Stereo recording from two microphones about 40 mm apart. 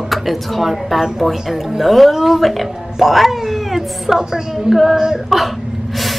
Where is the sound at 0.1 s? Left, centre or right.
Centre.